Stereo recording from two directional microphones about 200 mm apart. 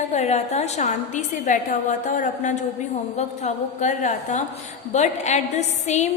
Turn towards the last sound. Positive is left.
turn(degrees=35)  # may be behind; listen again after turning